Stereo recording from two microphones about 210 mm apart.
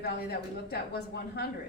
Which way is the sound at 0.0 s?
50° left (ahead or behind).